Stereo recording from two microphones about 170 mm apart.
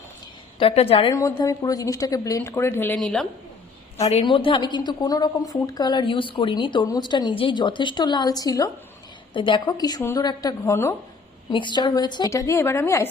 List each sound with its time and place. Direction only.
0.6 s a woman's voice: 35° left (ahead or behind)
1.1 s a woman's voice: 20° left (ahead or behind); by 3.2 s 5° left (ahead or behind)
3.9 s a woman's voice: 40° left (ahead or behind); by 10.9 s 15° left (ahead or behind)
11.5 s a woman's voice: 25° left (ahead or behind)